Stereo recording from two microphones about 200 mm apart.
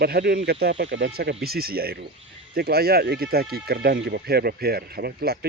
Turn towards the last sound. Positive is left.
turn(degrees=-50)  # may be behind; listen again after turning